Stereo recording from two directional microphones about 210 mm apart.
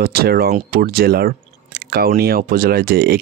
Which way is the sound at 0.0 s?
45° right (ahead or behind).